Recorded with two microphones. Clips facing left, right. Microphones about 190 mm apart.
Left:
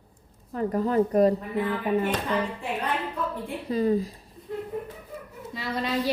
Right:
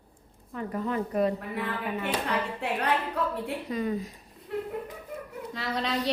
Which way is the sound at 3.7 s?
35° left (ahead or behind).